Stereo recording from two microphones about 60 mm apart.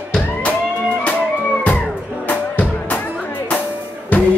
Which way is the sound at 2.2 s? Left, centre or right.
Left.